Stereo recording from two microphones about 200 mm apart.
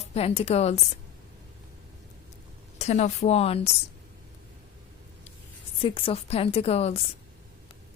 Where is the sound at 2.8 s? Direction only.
35° left (ahead or behind).